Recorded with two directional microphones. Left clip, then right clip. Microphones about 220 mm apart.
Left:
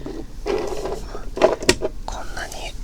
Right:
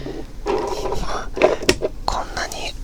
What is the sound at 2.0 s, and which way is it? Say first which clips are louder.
Whispering: right 7 dB; 30° right (ahead or behind).